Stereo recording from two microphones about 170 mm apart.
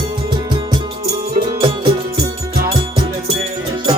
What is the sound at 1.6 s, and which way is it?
Music, 30° right (ahead or behind).